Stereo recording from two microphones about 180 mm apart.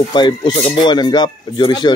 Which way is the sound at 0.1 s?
25° left (ahead or behind).